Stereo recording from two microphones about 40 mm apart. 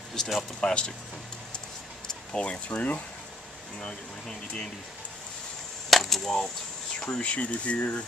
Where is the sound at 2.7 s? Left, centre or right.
Left.